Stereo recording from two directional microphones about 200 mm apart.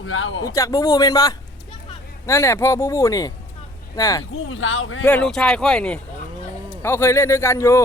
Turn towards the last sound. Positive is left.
turn(degrees=15)  # may be behind; listen again after turning